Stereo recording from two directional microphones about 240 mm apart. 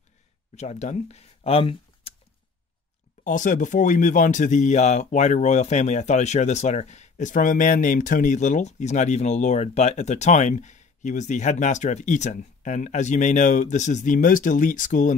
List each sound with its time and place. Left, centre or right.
0.6 s speech: left
3.3 s speech: left